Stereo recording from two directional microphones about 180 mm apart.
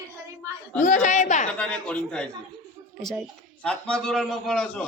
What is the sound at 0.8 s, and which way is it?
Speech, 45° left (ahead or behind).